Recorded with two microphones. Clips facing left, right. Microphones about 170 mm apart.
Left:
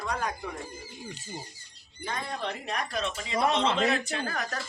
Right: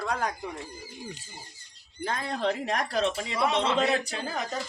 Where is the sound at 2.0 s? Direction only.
90° right.